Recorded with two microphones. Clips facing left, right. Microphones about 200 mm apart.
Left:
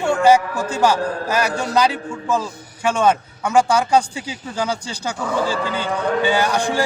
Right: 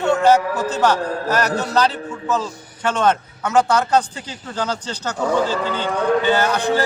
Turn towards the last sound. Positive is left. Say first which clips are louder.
# right 1 dB
turn(degrees=10)  # may be behind; listen again after turning